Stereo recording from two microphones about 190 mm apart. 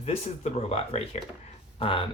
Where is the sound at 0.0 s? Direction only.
35° left (ahead or behind).